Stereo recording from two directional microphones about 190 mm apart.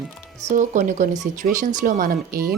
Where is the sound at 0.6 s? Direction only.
40° right (ahead or behind).